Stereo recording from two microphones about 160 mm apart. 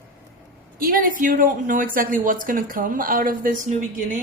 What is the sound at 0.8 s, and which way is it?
A woman's voice, 60° right (ahead or behind).